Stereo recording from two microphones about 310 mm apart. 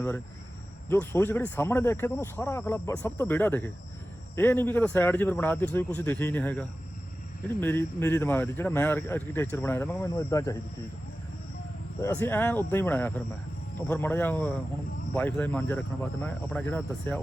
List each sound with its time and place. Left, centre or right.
0.9 s speech: centre
11.9 s speech: centre